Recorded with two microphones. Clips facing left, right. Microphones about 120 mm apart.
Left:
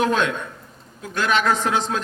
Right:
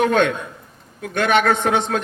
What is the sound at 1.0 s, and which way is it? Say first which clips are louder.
A man's voice: right 4 dB; 60° right (ahead or behind).